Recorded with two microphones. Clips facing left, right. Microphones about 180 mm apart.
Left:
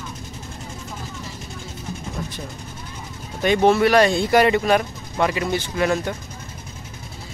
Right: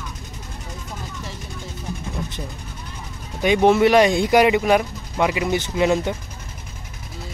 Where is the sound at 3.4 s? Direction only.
15° right (ahead or behind).